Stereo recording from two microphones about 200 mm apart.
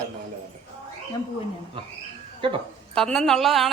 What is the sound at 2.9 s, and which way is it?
Speech, centre (ahead or behind).